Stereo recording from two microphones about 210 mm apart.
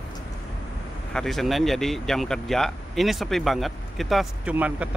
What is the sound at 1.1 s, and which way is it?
Speech, centre (ahead or behind).